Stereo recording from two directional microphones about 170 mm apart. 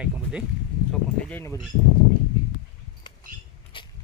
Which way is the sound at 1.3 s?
15° left (ahead or behind).